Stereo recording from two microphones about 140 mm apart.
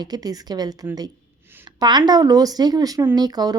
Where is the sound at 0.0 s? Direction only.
30° right (ahead or behind).